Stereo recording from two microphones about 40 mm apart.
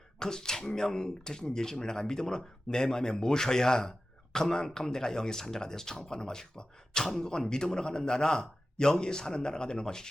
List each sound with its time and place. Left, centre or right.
0.2 s a man's voice: centre